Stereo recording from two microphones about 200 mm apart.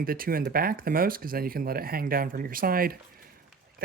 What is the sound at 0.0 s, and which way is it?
Speech, 45° right (ahead or behind).